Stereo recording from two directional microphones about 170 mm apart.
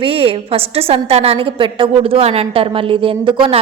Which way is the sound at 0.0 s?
35° right (ahead or behind).